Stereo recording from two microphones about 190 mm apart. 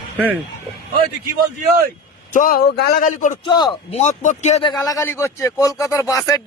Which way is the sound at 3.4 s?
25° left (ahead or behind).